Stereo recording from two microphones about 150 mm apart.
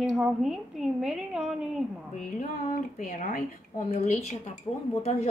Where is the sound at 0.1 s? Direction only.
Centre (ahead or behind).